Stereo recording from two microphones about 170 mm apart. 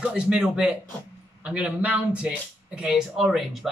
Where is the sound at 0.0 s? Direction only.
5° right (ahead or behind).